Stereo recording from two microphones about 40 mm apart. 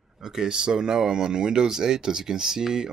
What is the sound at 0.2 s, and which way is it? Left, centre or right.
Speech, centre.